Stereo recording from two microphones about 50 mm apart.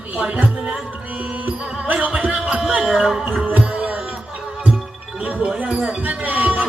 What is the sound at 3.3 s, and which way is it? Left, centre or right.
Music, right.